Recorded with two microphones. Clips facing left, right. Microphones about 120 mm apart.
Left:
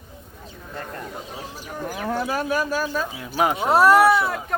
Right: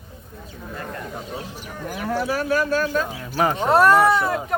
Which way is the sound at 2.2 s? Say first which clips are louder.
Right 3 dB; 20° left (ahead or behind).